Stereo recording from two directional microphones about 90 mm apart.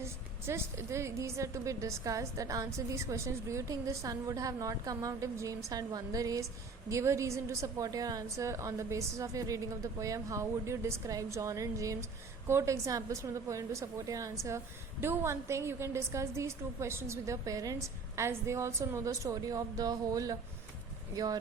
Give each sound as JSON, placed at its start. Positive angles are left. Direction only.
{"t": 0.0, "sound": "a woman's voice", "side_deg": -30}